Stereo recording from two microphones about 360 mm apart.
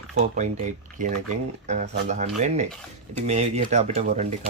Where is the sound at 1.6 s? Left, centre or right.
Centre.